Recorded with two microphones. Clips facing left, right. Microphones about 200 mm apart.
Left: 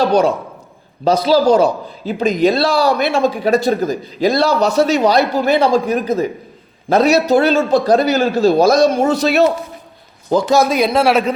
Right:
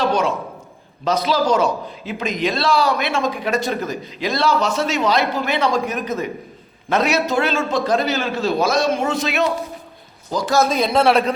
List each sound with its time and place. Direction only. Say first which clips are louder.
0.0 s a man's voice: left 6 dB; 35° left (ahead or behind)
10.8 s a man's voice: left 2 dB; 5° left (ahead or behind)